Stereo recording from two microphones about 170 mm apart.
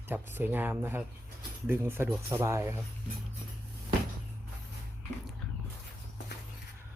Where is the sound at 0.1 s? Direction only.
10° right (ahead or behind).